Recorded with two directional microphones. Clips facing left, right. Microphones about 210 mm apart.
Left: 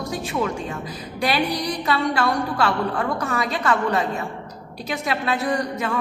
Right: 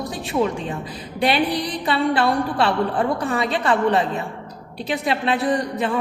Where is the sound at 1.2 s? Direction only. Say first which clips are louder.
Right 3 dB; 30° right (ahead or behind).